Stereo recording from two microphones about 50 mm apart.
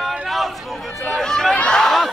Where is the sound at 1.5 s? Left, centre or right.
Left.